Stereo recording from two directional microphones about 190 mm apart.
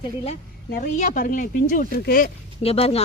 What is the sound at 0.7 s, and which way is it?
Speech, 40° left (ahead or behind).